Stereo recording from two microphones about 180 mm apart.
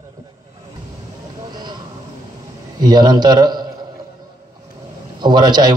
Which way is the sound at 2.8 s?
25° right (ahead or behind).